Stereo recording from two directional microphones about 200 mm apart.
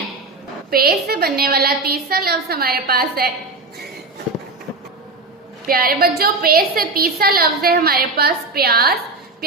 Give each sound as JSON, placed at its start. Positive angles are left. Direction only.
{"t": 0.7, "sound": "a woman's voice", "side_deg": -50}
{"t": 5.6, "sound": "a woman's voice", "side_deg": -50}